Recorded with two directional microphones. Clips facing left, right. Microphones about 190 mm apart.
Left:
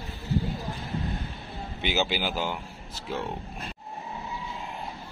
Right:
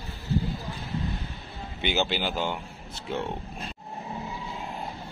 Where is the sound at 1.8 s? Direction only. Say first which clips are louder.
Right 1 dB; 5° left (ahead or behind).